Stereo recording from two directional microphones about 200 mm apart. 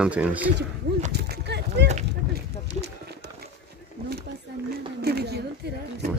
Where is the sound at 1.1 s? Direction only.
55° right (ahead or behind).